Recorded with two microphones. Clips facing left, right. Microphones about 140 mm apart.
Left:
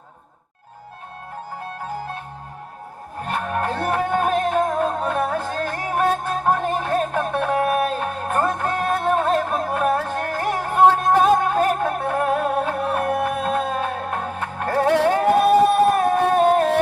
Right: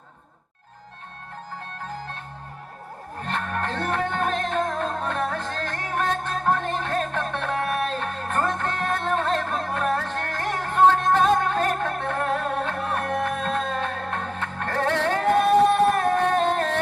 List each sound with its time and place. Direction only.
1.8 s music: 10° left (ahead or behind)
3.2 s music: 10° left (ahead or behind)